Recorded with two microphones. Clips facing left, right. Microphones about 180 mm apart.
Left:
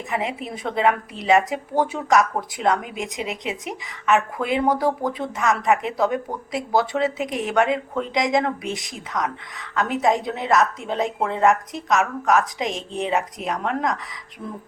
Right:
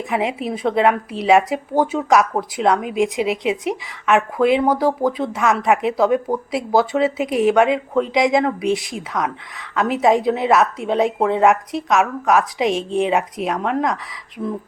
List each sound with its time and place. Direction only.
0.2 s a woman's voice: 5° right (ahead or behind)